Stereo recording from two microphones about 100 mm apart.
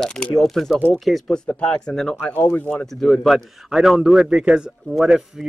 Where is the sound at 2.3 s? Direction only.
20° left (ahead or behind).